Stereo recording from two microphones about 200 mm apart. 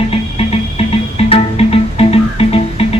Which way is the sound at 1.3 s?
30° left (ahead or behind).